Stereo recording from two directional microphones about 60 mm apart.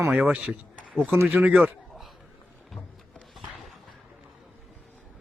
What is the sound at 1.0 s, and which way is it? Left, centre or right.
Speech, right.